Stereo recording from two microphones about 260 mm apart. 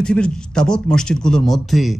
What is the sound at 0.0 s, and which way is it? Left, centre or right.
A man's voice, centre.